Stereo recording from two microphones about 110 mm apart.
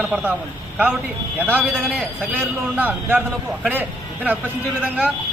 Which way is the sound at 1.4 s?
15° right (ahead or behind).